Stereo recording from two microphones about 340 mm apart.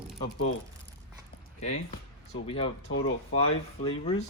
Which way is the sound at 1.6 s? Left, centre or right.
Centre.